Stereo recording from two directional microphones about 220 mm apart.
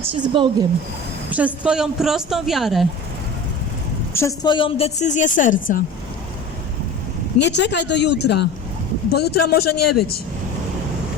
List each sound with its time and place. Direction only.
0.1 s a woman's voice: 20° right (ahead or behind)
1.3 s speech: 5° right (ahead or behind)
4.1 s a woman's voice: 15° left (ahead or behind); by 5.8 s 35° left (ahead or behind)
7.3 s speech: 50° left (ahead or behind)